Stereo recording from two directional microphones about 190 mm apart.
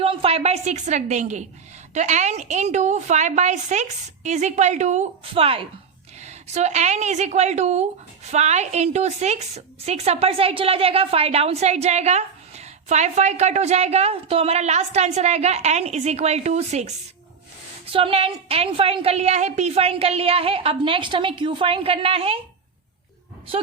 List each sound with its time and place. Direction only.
0.0 s a woman's voice: 30° right (ahead or behind)